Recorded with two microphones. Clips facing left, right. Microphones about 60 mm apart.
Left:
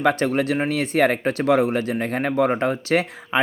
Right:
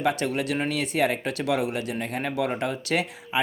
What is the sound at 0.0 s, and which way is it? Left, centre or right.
Speech, left.